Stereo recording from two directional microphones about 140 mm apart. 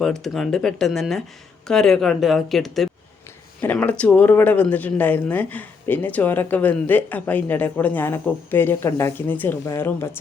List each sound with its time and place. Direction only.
0.0 s speech: centre (ahead or behind)
3.6 s speech: 10° left (ahead or behind)